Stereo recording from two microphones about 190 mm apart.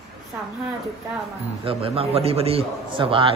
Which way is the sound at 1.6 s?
30° right (ahead or behind).